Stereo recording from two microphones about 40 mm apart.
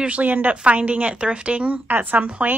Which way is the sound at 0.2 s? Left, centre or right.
Right.